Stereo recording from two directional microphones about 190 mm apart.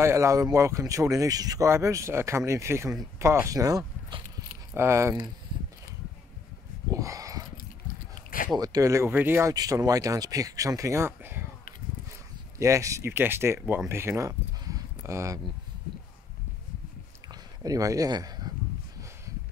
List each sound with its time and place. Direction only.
0.0 s speech: 15° right (ahead or behind)
6.9 s a sound: 15° right (ahead or behind)
8.5 s speech: 20° right (ahead or behind)
12.5 s speech: 15° right (ahead or behind)
17.3 s speech: 20° right (ahead or behind)